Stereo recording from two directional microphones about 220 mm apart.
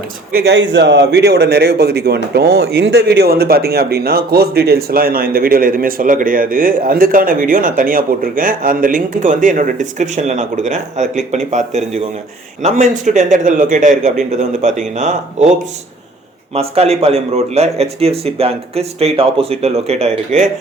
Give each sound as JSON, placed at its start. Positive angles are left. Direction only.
{"t": 0.3, "sound": "a man's voice", "side_deg": -50}
{"t": 16.6, "sound": "a man's voice", "side_deg": -25}